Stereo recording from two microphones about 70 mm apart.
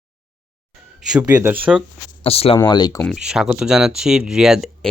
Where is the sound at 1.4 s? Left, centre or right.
Right.